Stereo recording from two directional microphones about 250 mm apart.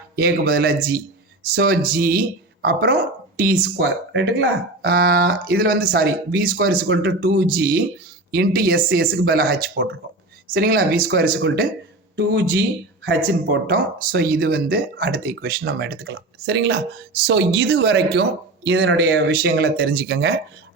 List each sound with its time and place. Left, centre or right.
0.2 s speech: right